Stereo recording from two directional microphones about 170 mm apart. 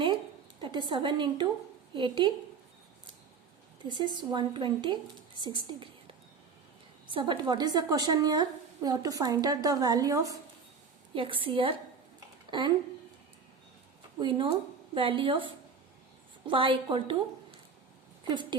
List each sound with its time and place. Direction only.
0.6 s a woman's voice: 30° right (ahead or behind)
3.8 s a woman's voice: 25° right (ahead or behind)
7.1 s a woman's voice: 30° right (ahead or behind)
11.1 s a woman's voice: 30° right (ahead or behind)
14.2 s a woman's voice: 30° right (ahead or behind)